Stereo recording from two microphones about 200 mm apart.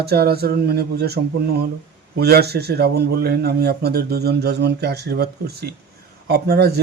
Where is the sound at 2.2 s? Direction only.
50° right (ahead or behind).